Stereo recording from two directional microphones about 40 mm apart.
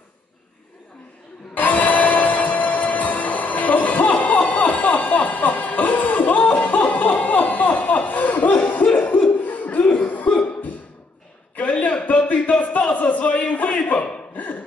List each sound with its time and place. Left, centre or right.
1.5 s music: left
6.3 s music: left
8.9 s laughter: left
9.4 s chuckle: left
10.0 s cough: left
11.5 s a sound: left